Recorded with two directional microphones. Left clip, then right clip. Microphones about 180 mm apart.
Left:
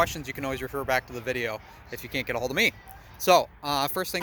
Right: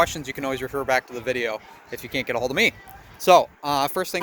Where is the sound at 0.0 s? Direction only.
Centre (ahead or behind).